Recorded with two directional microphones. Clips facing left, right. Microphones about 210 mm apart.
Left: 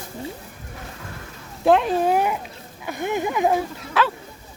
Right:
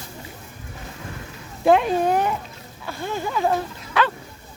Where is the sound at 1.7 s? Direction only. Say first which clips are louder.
Even; centre (ahead or behind).